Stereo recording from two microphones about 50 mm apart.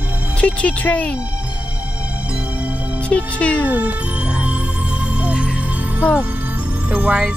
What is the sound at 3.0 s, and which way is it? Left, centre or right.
Speech, left.